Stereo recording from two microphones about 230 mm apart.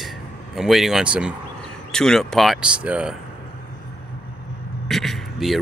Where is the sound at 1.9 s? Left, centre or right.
Centre.